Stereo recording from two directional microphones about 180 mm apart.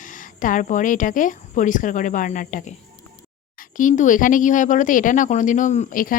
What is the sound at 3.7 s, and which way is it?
Speech, 45° left (ahead or behind).